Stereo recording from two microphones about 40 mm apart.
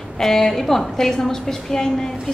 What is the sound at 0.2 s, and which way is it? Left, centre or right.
A woman's voice, centre.